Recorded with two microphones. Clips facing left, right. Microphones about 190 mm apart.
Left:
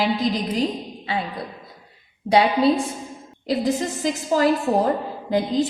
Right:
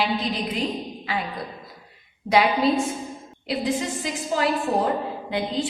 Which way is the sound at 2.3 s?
30° left (ahead or behind).